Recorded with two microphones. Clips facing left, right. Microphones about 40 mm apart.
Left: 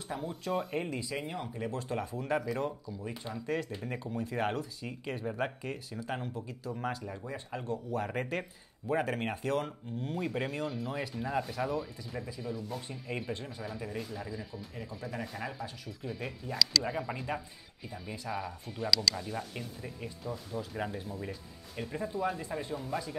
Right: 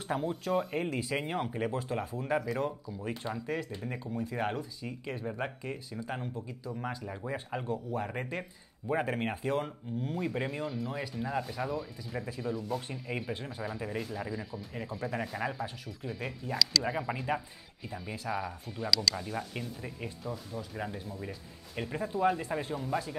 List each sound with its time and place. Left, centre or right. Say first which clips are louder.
0.4 s speech: right 2 dB; centre
0.9 s speech: right 3 dB; right
1.3 s speech: right 5 dB; right
1.7 s speech: right 1 dB; centre
3.3 s speech: left 1 dB; centre
6.9 s speech: right 1 dB; centre
10.0 s speech: even; centre
21.7 s speech: right 2 dB; centre
22.8 s speech: right 3 dB; centre